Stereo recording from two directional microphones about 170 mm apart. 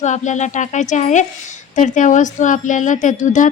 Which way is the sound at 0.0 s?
45° left (ahead or behind).